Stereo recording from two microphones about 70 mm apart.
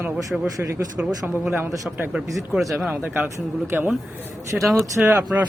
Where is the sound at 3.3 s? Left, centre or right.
Right.